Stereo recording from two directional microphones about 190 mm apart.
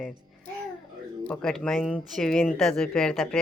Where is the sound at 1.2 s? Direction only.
5° left (ahead or behind).